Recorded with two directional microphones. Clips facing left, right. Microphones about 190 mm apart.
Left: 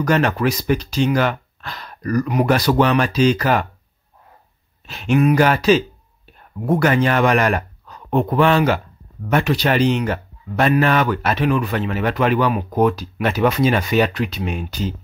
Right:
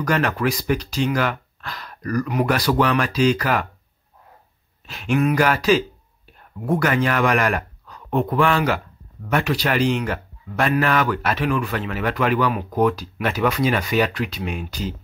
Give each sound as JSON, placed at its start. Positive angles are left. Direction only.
{"t": 0.0, "sound": "a man's voice", "side_deg": 25}
{"t": 4.8, "sound": "a man's voice", "side_deg": 25}